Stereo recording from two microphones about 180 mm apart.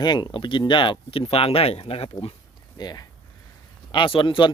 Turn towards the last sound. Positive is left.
turn(degrees=25)  # may be behind; listen again after turning